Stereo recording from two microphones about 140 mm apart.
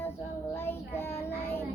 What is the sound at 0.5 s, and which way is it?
Child singing, 15° left (ahead or behind).